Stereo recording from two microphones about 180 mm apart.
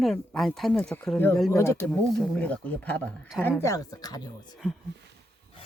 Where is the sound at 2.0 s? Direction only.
Centre (ahead or behind); by 4.2 s 20° left (ahead or behind).